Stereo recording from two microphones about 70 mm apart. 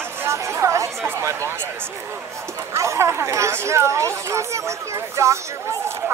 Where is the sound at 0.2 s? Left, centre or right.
Right.